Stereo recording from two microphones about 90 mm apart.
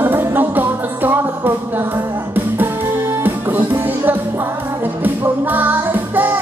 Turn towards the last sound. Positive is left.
turn(degrees=-20)  # may be behind; listen again after turning